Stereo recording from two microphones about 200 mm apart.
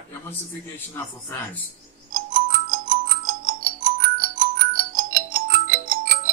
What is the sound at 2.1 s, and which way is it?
Music, 45° right (ahead or behind).